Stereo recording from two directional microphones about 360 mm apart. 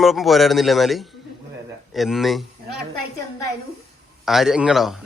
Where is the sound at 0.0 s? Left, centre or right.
Centre.